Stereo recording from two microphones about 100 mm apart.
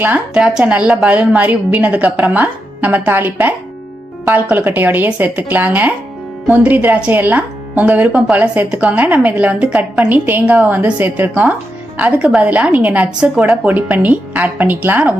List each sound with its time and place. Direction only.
0.0 s speech: 15° right (ahead or behind)